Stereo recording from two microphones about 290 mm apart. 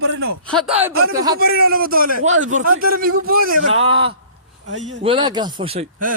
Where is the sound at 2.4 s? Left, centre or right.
Right.